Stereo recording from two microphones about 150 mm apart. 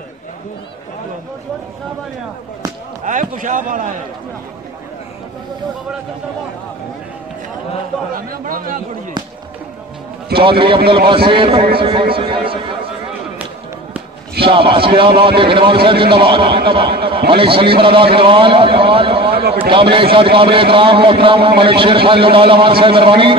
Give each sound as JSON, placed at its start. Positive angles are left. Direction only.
{"t": 3.0, "sound": "a man's voice", "side_deg": -60}
{"t": 8.1, "sound": "speech", "side_deg": -70}
{"t": 10.3, "sound": "a man's voice", "side_deg": -35}
{"t": 14.4, "sound": "a man's voice", "side_deg": -35}
{"t": 19.3, "sound": "a man's voice", "side_deg": -90}
{"t": 19.7, "sound": "a man's voice", "side_deg": -35}